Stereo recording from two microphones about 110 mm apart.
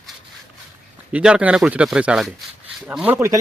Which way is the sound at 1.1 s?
10° right (ahead or behind).